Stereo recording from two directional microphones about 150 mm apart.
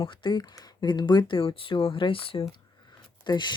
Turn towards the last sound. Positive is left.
turn(degrees=30)  # may be behind; listen again after turning